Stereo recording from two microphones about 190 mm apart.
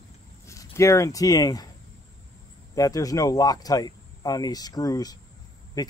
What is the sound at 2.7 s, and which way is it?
A man's voice, 20° left (ahead or behind).